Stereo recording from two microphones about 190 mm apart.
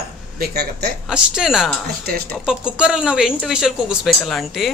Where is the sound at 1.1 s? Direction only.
5° right (ahead or behind).